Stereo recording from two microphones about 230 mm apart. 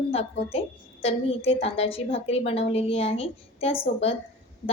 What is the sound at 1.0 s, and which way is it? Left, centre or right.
A woman's voice, left.